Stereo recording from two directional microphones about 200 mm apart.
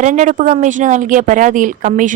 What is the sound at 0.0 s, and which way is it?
A woman's voice, 40° right (ahead or behind).